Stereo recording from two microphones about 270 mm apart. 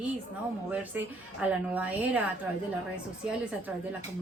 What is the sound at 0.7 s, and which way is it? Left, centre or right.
A woman's voice, centre.